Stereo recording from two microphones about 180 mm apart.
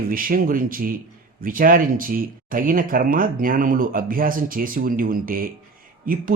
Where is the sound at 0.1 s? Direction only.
50° right (ahead or behind).